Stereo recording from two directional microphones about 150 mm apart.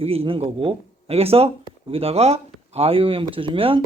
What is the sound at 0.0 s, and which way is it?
Speech, 40° right (ahead or behind).